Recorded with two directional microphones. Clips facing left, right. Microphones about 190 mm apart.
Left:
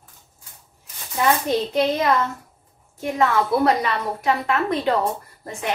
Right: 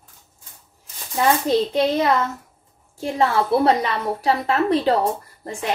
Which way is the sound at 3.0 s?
30° right (ahead or behind).